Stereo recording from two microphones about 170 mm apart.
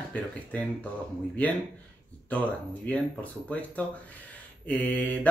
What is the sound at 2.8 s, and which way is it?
Speech, 10° left (ahead or behind).